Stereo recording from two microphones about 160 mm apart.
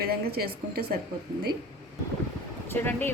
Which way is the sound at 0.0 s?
70° right (ahead or behind).